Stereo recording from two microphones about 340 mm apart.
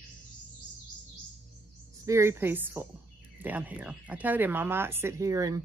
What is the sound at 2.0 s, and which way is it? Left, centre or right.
A woman's voice, centre.